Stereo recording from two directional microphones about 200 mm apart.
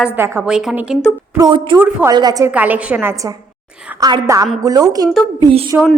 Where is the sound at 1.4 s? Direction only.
25° right (ahead or behind).